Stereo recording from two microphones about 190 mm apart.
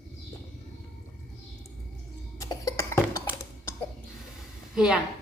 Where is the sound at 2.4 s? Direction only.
20° left (ahead or behind).